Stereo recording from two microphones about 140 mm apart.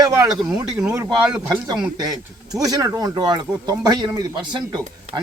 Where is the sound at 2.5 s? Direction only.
25° right (ahead or behind).